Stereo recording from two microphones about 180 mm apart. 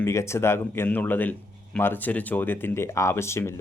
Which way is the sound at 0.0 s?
15° left (ahead or behind).